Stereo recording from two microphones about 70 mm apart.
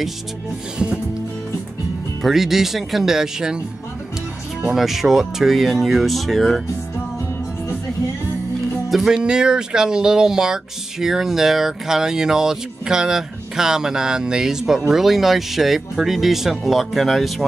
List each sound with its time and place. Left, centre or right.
2.2 s speech: centre
4.6 s speech: centre
8.9 s speech: centre